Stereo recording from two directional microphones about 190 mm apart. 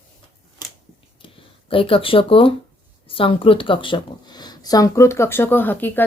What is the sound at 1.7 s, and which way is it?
Speech, 30° left (ahead or behind).